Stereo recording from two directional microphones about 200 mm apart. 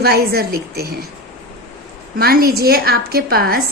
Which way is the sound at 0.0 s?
50° right (ahead or behind).